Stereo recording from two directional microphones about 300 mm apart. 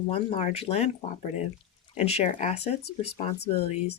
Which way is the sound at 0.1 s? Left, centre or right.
Left.